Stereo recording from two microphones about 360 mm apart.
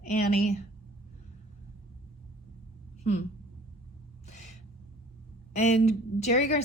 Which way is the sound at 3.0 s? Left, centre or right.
Centre.